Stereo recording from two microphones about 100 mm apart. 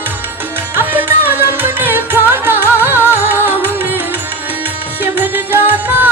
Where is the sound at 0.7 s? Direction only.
20° right (ahead or behind).